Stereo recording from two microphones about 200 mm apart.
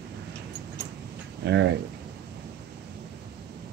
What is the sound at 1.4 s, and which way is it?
Speech, 65° right (ahead or behind).